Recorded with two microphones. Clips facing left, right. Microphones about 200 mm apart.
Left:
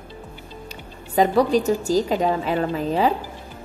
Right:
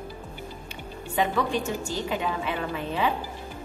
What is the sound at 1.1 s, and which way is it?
A woman's voice, 40° left (ahead or behind).